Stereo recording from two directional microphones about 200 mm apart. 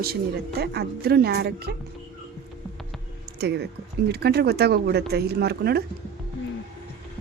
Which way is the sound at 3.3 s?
55° right (ahead or behind).